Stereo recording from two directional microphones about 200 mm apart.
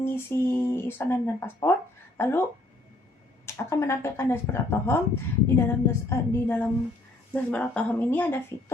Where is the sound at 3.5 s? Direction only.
15° left (ahead or behind).